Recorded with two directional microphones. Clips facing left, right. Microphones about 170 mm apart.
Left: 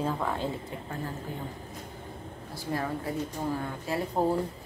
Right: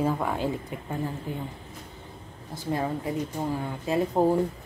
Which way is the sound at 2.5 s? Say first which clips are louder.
Right 4 dB; 20° right (ahead or behind).